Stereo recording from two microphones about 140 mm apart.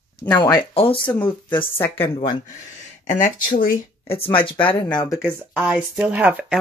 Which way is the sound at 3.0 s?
70° left (ahead or behind).